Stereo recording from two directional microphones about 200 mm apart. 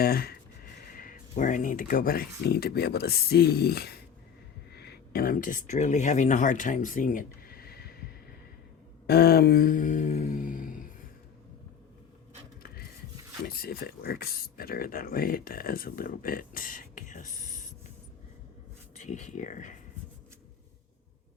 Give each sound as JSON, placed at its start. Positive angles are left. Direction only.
{"t": 0.0, "sound": "speech", "side_deg": 50}
{"t": 9.0, "sound": "a sound", "side_deg": 50}
{"t": 13.4, "sound": "speech", "side_deg": 50}
{"t": 19.0, "sound": "speech", "side_deg": 35}